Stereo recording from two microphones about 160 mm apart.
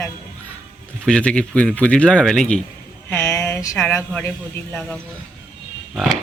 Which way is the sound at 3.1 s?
15° left (ahead or behind).